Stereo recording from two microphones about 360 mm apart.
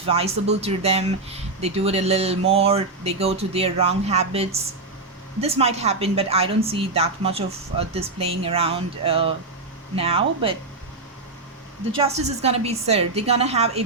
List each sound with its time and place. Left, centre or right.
0.1 s a woman's voice: centre
11.9 s a woman's voice: centre